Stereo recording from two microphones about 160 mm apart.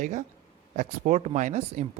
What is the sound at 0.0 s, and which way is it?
Speech, 50° right (ahead or behind).